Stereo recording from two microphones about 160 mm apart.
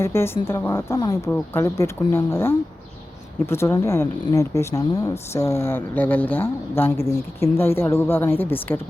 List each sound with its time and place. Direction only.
0.0 s speech: 15° left (ahead or behind)